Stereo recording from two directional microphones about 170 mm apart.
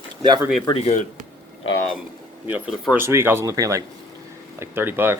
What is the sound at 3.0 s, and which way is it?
Speech, 15° right (ahead or behind).